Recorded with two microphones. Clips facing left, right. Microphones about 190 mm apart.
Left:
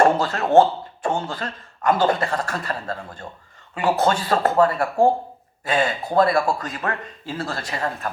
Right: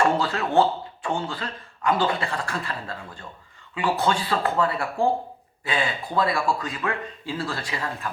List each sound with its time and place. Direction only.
0.0 s speech: 40° left (ahead or behind)